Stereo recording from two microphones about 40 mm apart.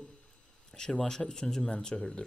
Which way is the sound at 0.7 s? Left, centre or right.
Centre.